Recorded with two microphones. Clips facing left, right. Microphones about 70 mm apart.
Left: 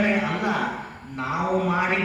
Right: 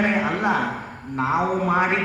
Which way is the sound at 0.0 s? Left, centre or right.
Right.